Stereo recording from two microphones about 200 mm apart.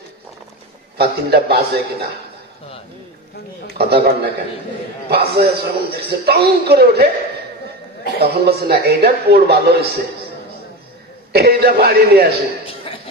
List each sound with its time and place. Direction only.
0.9 s a man's voice: 55° right (ahead or behind)
3.7 s a man's voice: 50° right (ahead or behind)
8.2 s a man's voice: 50° right (ahead or behind)
11.3 s a man's voice: 50° right (ahead or behind)